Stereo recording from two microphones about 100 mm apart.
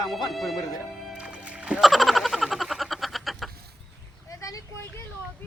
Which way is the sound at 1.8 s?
Centre (ahead or behind).